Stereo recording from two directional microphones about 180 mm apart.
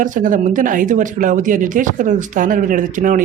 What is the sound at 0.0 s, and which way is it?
Speech, 45° right (ahead or behind).